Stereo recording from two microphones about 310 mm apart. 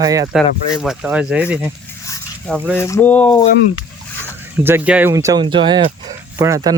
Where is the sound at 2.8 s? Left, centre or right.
Centre.